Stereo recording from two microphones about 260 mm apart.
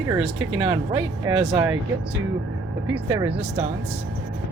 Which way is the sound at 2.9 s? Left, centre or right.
Centre.